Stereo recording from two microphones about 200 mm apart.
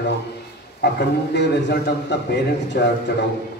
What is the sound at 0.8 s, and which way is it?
A man's voice, 60° left (ahead or behind).